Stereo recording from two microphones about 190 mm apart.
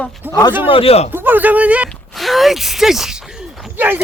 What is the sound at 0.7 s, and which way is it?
Speech, 30° left (ahead or behind).